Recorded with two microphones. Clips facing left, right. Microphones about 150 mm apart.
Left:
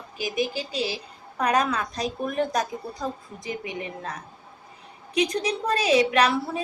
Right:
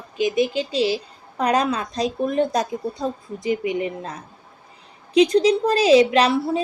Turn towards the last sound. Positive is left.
turn(degrees=-25)  # may be behind; listen again after turning